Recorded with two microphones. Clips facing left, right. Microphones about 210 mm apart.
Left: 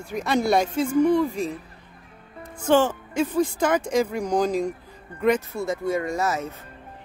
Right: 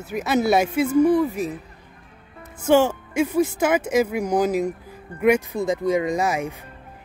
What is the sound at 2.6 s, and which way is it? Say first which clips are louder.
Speech: right 2 dB; 10° right (ahead or behind).